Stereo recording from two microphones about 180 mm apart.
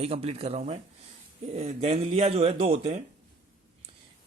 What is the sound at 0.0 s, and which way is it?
Speech, 35° right (ahead or behind).